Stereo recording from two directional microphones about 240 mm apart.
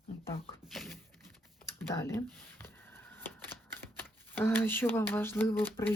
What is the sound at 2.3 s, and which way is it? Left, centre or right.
Typewriter, centre.